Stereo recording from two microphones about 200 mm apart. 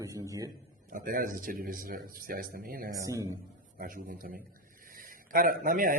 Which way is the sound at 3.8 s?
45° right (ahead or behind).